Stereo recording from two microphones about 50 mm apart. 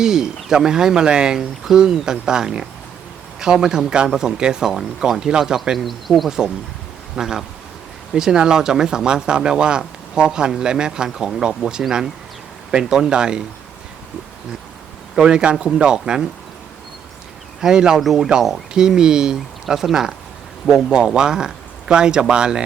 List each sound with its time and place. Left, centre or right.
0.0 s speech: centre
5.7 s speech: centre
7.2 s speech: centre
15.1 s speech: centre
17.6 s speech: centre
18.7 s speech: centre